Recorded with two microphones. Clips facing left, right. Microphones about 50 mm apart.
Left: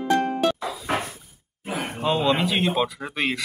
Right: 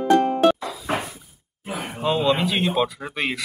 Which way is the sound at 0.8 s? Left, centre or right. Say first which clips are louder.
Right 1 dB; centre.